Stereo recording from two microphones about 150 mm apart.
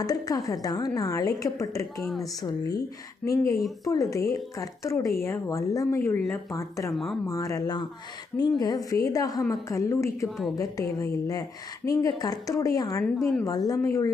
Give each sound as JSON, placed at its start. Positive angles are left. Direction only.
{"t": 0.0, "sound": "a woman's voice", "side_deg": 25}
{"t": 2.0, "sound": "speech", "side_deg": 0}
{"t": 2.4, "sound": "a woman's voice", "side_deg": 25}
{"t": 6.9, "sound": "speech", "side_deg": 0}
{"t": 7.3, "sound": "a woman's voice", "side_deg": 20}
{"t": 10.2, "sound": "speech", "side_deg": 0}
{"t": 10.5, "sound": "a woman's voice", "side_deg": 20}
{"t": 13.1, "sound": "speech", "side_deg": 0}
{"t": 13.4, "sound": "a woman's voice", "side_deg": 25}